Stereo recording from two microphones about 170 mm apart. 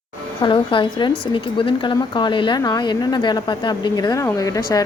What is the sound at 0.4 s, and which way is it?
A woman's voice, 30° left (ahead or behind).